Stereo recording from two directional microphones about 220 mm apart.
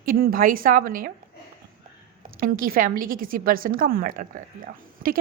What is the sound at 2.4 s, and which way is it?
A woman's voice, 40° right (ahead or behind).